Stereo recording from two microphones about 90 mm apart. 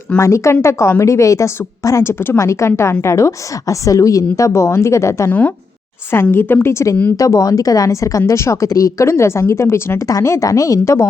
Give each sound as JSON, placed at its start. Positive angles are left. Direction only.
{"t": 0.2, "sound": "a woman's voice", "side_deg": 35}
{"t": 5.3, "sound": "a woman's voice", "side_deg": 15}